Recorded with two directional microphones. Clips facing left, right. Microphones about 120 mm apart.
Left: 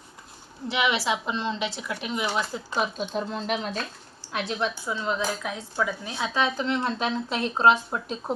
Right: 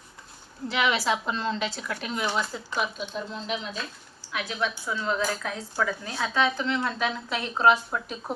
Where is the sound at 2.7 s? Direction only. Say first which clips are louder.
Left 3 dB; 40° left (ahead or behind).